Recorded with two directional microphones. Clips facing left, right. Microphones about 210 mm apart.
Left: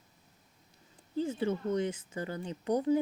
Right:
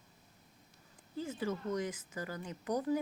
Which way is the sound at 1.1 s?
30° left (ahead or behind).